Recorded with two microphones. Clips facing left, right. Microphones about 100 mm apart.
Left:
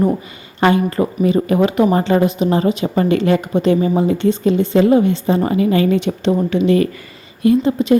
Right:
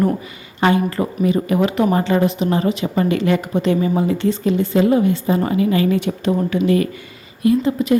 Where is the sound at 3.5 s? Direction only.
20° left (ahead or behind).